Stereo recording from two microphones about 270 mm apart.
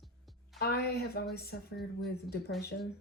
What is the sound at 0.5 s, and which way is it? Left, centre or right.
Speech, left.